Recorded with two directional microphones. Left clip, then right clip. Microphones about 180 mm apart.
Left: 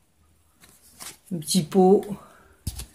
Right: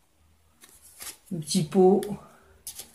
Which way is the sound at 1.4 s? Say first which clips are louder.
Left 1 dB; 55° left (ahead or behind).